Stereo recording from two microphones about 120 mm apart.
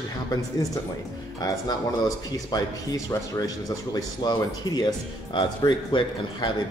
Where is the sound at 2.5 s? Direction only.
35° left (ahead or behind).